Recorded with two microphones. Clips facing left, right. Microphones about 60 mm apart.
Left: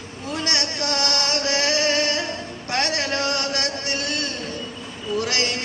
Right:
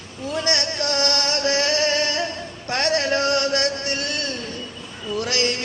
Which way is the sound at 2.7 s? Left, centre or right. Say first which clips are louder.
Right 3 dB; right.